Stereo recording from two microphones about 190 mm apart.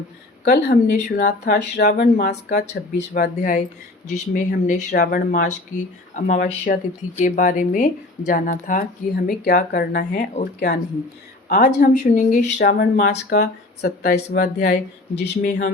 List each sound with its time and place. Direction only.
0.4 s speech: 60° left (ahead or behind)
2.3 s a woman's voice: 40° left (ahead or behind); by 11.8 s 55° left (ahead or behind)
11.8 s speech: 40° left (ahead or behind)
12.4 s speech: 60° left (ahead or behind)
14.1 s speech: 40° left (ahead or behind)
14.7 s speech: 65° left (ahead or behind)